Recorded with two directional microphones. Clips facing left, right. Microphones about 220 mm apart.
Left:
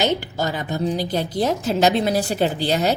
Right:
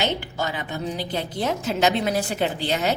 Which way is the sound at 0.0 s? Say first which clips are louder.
Left 4 dB; 40° left (ahead or behind).